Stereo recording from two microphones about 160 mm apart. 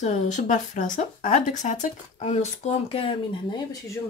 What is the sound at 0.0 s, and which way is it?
Speech, 50° left (ahead or behind).